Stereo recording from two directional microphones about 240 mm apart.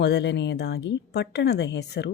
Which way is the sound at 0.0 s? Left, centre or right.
Left.